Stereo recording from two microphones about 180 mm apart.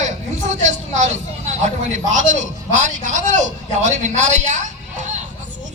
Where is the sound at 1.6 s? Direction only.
40° right (ahead or behind).